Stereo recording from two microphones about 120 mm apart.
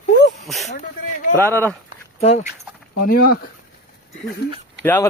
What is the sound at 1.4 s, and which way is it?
Speech, 20° left (ahead or behind).